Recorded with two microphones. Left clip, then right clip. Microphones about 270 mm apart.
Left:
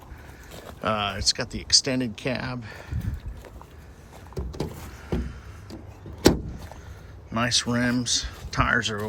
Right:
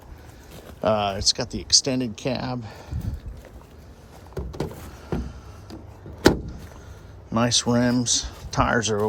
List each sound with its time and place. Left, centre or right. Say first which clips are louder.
0.5 s a sound: left 2 dB; centre
0.8 s speech: right 4 dB; centre
4.4 s vehicle: right 2 dB; centre
7.3 s speech: right 3 dB; centre